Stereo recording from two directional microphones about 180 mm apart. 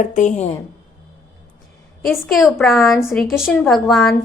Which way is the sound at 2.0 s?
Centre (ahead or behind).